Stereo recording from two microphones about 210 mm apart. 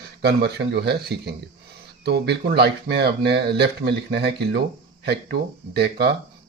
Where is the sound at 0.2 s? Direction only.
50° right (ahead or behind).